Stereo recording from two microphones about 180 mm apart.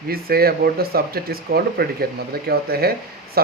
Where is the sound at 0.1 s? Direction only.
55° right (ahead or behind).